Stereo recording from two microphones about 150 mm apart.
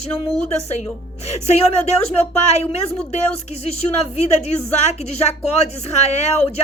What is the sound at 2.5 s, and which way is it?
Speech, 45° left (ahead or behind).